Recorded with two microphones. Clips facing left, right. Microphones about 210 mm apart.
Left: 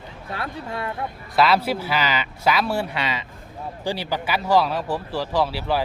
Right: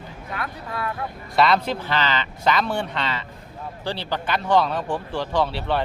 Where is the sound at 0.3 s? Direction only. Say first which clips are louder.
Left 2 dB; 30° left (ahead or behind).